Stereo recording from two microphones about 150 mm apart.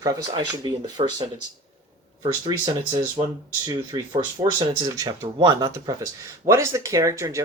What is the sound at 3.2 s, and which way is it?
Speech, 35° right (ahead or behind).